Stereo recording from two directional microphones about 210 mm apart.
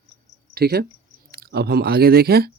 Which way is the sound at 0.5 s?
45° right (ahead or behind).